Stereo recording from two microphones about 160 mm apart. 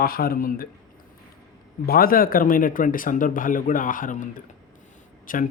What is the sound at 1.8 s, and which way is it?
Speech, 65° left (ahead or behind).